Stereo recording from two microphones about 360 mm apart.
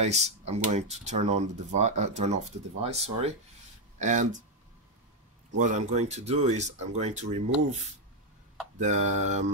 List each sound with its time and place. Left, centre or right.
0.0 s speech: centre
5.6 s speech: centre
8.7 s speech: centre